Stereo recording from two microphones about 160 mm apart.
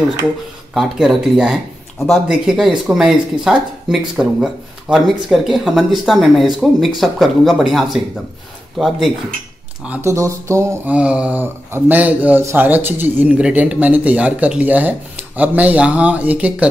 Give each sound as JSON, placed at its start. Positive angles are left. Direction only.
{"t": 0.7, "sound": "speech", "side_deg": 0}
{"t": 9.8, "sound": "speech", "side_deg": -20}
{"t": 11.0, "sound": "speech", "side_deg": -5}